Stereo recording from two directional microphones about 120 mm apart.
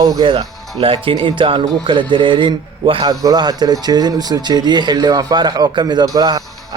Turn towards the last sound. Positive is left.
turn(degrees=-35)  # may be behind; listen again after turning